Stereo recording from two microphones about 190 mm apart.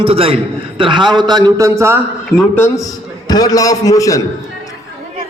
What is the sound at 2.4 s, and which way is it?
A man's voice, 10° left (ahead or behind).